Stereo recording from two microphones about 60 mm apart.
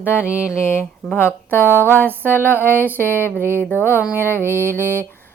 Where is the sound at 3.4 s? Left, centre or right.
Right.